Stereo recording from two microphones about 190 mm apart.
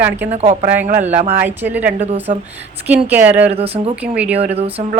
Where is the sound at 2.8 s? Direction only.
10° right (ahead or behind).